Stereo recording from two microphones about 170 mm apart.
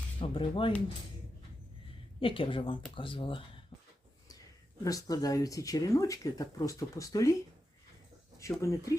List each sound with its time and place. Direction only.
0.2 s speech: 30° left (ahead or behind)
2.2 s speech: 30° left (ahead or behind)
4.8 s speech: 20° left (ahead or behind)
8.4 s speech: 20° left (ahead or behind)